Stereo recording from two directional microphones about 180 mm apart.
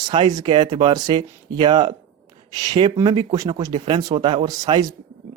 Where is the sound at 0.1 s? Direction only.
25° right (ahead or behind).